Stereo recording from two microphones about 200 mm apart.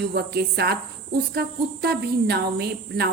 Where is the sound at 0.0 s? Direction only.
55° right (ahead or behind).